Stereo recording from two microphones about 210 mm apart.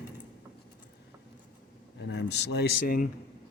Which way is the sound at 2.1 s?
55° left (ahead or behind).